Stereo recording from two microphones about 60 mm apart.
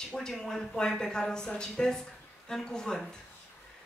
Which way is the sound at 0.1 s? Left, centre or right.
Centre.